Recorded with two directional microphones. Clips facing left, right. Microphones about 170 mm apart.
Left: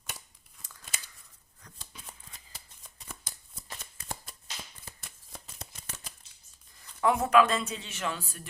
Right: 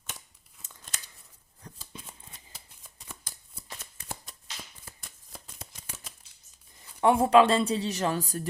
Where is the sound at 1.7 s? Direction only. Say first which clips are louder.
Right 8 dB; 30° right (ahead or behind).